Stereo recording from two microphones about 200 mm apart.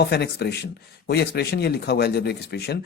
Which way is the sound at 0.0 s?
55° left (ahead or behind).